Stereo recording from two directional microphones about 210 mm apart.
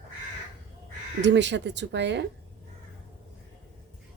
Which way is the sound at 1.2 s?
55° right (ahead or behind).